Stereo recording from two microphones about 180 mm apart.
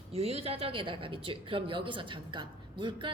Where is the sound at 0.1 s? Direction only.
35° right (ahead or behind).